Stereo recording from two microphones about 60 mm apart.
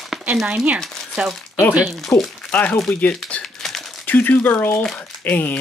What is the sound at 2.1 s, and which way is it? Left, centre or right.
Speech, left.